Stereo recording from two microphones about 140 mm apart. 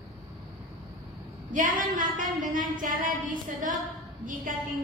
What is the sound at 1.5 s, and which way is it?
A woman's voice, 80° right.